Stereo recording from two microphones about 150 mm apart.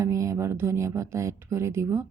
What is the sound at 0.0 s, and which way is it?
A woman's voice, 20° right (ahead or behind).